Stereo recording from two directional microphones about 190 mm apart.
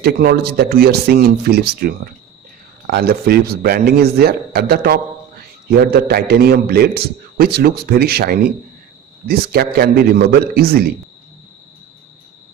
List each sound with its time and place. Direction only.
0.0 s a man's voice: 55° right (ahead or behind)